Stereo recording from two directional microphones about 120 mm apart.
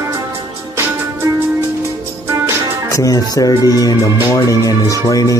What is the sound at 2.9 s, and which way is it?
Speech, 30° left (ahead or behind).